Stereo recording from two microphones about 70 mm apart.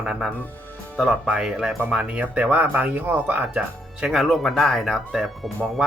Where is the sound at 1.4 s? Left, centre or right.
Centre.